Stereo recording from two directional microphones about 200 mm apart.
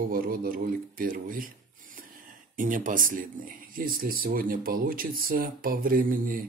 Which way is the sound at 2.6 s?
40° right (ahead or behind).